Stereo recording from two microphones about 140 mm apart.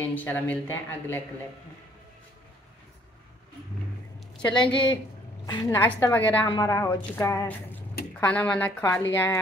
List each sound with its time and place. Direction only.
0.1 s a woman's voice: 10° left (ahead or behind)
4.4 s a woman's voice: 35° left (ahead or behind)
5.5 s a woman's voice: 20° left (ahead or behind)
6.4 s a woman's voice: 30° left (ahead or behind)